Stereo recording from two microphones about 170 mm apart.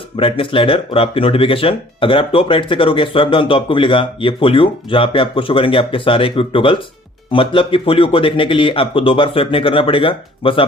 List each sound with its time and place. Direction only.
0.2 s speech: 30° left (ahead or behind)